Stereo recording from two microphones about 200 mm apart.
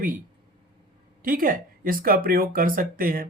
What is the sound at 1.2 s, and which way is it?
Speech, 45° right (ahead or behind).